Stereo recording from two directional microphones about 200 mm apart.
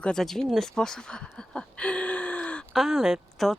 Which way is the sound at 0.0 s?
5° left (ahead or behind).